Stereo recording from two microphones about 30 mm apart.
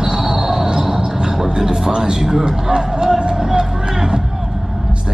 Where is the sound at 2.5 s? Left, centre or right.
Right.